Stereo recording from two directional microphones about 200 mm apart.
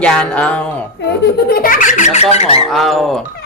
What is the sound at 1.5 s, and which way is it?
Speech, 45° left (ahead or behind).